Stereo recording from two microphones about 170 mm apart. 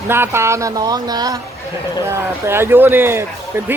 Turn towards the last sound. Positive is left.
turn(degrees=-15)  # may be behind; listen again after turning